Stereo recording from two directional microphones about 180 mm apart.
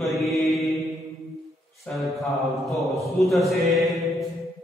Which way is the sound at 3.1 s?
Centre (ahead or behind).